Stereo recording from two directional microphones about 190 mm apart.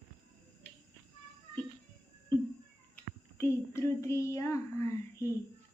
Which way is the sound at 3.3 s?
15° left (ahead or behind).